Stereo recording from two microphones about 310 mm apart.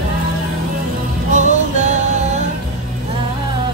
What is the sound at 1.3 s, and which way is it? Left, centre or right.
Music, right.